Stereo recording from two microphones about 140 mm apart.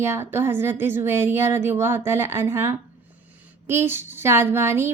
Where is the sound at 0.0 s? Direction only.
20° right (ahead or behind).